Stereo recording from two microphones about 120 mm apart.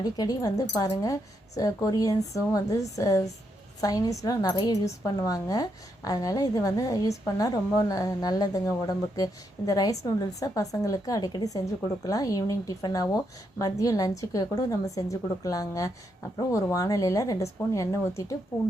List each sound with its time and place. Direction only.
0.0 s a woman's voice: 30° left (ahead or behind)